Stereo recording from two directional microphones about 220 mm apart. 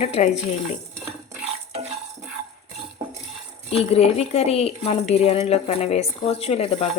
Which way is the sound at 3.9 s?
30° left (ahead or behind).